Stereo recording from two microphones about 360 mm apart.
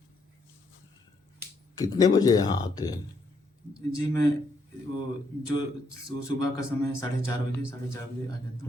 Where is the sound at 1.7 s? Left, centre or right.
Centre.